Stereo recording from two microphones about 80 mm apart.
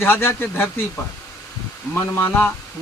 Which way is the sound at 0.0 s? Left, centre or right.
Left.